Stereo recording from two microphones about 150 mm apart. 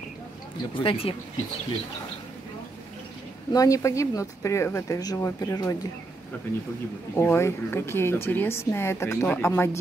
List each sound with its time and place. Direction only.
0.7 s speech: 35° left (ahead or behind)
3.5 s speech: 20° left (ahead or behind)
7.2 s a woman's voice: 15° left (ahead or behind)